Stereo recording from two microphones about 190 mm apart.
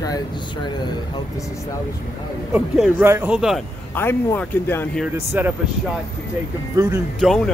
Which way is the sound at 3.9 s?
10° left (ahead or behind).